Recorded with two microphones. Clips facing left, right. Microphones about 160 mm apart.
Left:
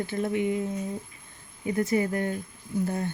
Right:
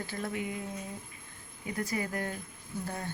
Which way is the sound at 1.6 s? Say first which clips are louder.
Left 9 dB; 25° left (ahead or behind).